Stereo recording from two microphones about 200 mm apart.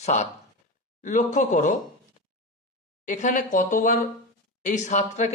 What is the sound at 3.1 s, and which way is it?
A man's voice, 40° left (ahead or behind).